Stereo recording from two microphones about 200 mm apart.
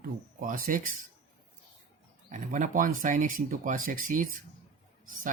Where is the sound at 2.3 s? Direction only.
40° right (ahead or behind).